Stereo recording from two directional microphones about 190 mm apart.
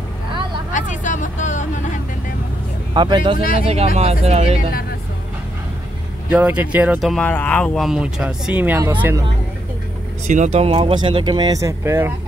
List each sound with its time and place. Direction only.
0.7 s vehicle: 40° left (ahead or behind)
2.9 s speech: 25° right (ahead or behind)
6.3 s speech: 10° right (ahead or behind)
10.2 s speech: 40° right (ahead or behind); by 12.1 s 15° right (ahead or behind)